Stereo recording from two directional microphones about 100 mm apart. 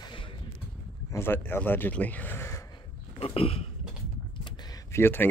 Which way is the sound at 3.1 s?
75° left (ahead or behind).